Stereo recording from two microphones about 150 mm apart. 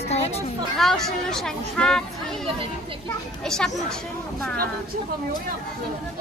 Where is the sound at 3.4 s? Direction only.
5° left (ahead or behind).